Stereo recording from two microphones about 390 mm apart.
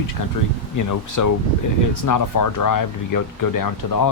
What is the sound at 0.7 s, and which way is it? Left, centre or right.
Speech, left.